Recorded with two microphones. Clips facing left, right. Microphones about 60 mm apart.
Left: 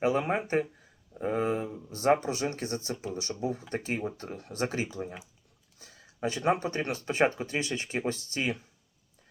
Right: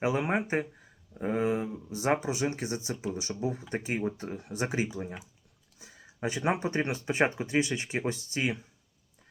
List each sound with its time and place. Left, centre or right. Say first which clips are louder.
0.0 s speech: left 1 dB; centre